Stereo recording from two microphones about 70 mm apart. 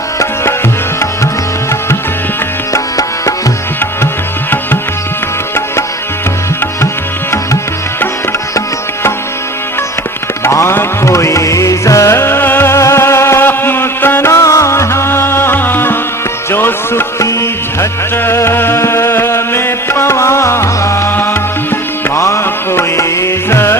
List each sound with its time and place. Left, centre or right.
2.7 s music: left
7.3 s music: left
10.4 s music: left